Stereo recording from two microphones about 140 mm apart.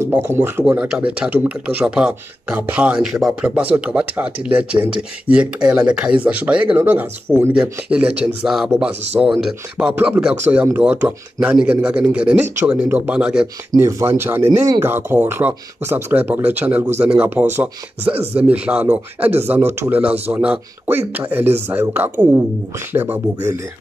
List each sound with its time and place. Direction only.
0.0 s speech: 15° right (ahead or behind)
13.7 s speech: 20° right (ahead or behind)